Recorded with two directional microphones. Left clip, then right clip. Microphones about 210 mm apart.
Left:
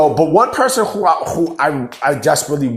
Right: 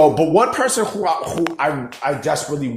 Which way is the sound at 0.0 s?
10° left (ahead or behind).